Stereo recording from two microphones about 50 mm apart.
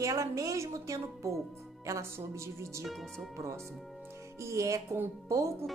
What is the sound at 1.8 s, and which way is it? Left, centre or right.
Speech, right.